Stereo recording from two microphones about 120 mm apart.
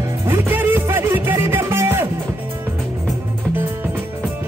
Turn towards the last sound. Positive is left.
turn(degrees=-20)  # may be behind; listen again after turning